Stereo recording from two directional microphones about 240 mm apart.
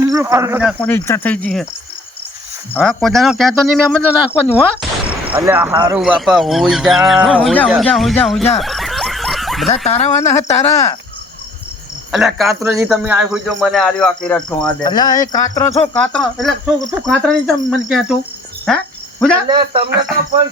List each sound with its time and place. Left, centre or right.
0.1 s speech: centre
0.6 s a man's voice: centre
0.9 s cricket: centre
2.7 s a man's voice: centre
6.0 s a man's voice: centre
8.6 s snicker: centre
9.6 s speech: left
10.2 s cricket: centre
12.1 s a man's voice: centre
14.8 s cricket: centre
16.0 s a man's voice: centre
19.5 s speech: centre